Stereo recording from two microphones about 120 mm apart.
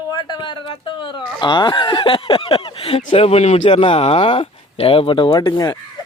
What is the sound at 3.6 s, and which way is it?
Speech, 45° left (ahead or behind).